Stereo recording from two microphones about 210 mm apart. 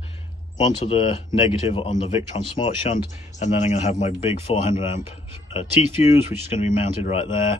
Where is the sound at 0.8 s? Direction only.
25° left (ahead or behind).